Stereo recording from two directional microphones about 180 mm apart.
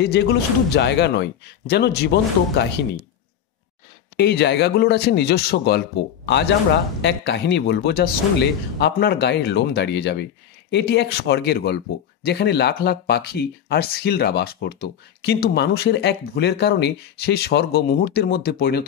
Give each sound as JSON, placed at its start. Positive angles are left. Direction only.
{"t": 0.0, "sound": "speech", "side_deg": 70}
{"t": 4.2, "sound": "speech", "side_deg": 65}